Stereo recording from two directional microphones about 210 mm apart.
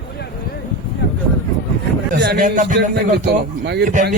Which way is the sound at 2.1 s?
50° right (ahead or behind).